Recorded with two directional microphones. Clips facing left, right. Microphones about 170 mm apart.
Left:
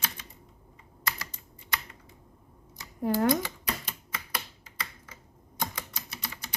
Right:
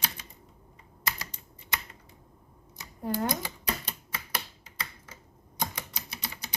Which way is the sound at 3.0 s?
90° left.